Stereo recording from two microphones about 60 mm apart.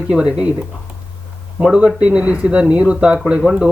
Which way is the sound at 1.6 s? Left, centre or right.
Centre.